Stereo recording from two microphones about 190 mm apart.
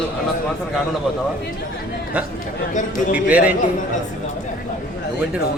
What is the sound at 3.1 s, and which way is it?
Speech, 10° right (ahead or behind).